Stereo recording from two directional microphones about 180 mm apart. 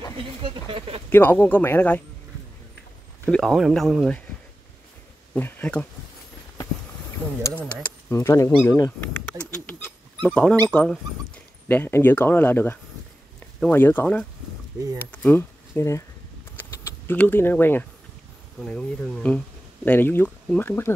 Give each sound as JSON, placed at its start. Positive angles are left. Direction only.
{"t": 0.7, "sound": "speech", "side_deg": -30}
{"t": 1.1, "sound": "speech", "side_deg": 10}
{"t": 3.3, "sound": "speech", "side_deg": 0}
{"t": 5.3, "sound": "speech", "side_deg": 10}
{"t": 7.6, "sound": "speech", "side_deg": 10}
{"t": 9.4, "sound": "dog", "side_deg": 10}
{"t": 10.7, "sound": "speech", "side_deg": 5}
{"t": 16.5, "sound": "typing", "side_deg": 10}
{"t": 18.6, "sound": "speech", "side_deg": 5}